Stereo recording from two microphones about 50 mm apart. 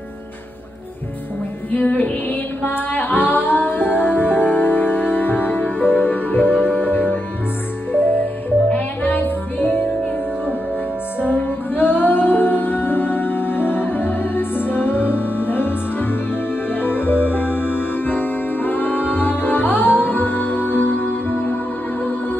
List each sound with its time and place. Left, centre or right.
1.7 s music: left
8.6 s music: left
11.1 s music: left